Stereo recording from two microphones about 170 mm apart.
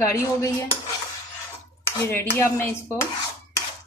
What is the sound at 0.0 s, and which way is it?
Dishes, 20° left (ahead or behind).